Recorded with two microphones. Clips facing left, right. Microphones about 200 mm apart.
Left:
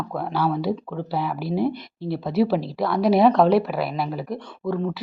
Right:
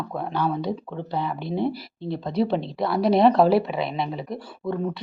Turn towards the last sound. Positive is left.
turn(degrees=0)  # may be behind; listen again after turning